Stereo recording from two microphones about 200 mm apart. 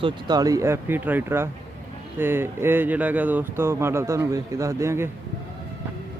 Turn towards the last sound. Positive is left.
turn(degrees=-15)  # may be behind; listen again after turning